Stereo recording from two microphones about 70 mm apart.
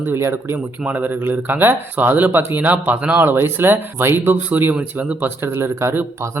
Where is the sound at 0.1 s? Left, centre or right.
Right.